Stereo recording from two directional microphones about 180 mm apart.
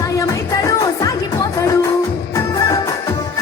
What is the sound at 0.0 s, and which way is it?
Music, 20° left (ahead or behind).